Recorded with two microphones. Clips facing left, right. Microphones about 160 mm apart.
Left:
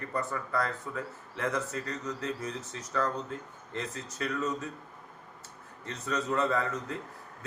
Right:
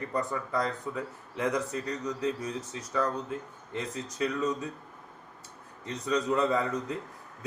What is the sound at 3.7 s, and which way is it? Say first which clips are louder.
Speech: right 2 dB; 15° right (ahead or behind).